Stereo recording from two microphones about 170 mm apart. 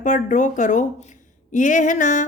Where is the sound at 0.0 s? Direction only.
45° left (ahead or behind).